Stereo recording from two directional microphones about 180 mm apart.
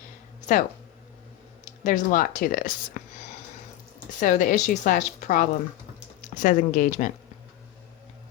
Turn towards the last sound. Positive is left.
turn(degrees=45)  # may be behind; listen again after turning